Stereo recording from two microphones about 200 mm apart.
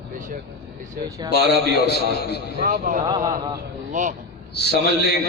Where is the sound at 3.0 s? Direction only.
20° right (ahead or behind).